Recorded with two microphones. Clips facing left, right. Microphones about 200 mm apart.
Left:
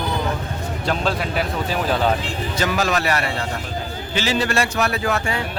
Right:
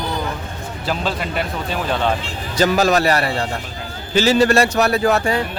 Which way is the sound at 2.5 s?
35° right (ahead or behind).